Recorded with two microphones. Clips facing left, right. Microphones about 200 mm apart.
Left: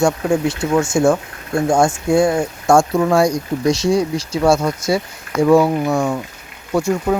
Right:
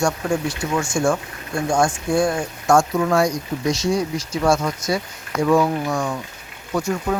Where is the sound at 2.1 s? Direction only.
25° left (ahead or behind).